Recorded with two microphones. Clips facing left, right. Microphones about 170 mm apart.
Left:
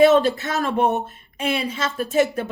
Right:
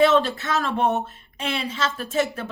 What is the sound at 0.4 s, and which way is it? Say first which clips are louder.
Speech: left 1 dB; 45° left (ahead or behind).